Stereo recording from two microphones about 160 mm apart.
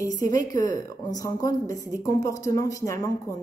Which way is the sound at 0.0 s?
20° left (ahead or behind).